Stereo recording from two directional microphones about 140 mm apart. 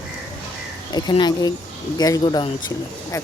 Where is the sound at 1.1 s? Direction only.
30° left (ahead or behind).